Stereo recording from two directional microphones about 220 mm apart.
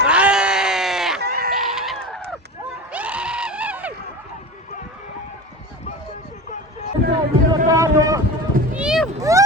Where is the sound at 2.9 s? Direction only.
5° right (ahead or behind).